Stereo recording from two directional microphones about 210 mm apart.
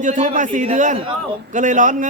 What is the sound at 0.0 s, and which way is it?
A man's voice, 35° right (ahead or behind).